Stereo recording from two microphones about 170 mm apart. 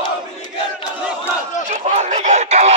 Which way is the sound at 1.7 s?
45° right (ahead or behind).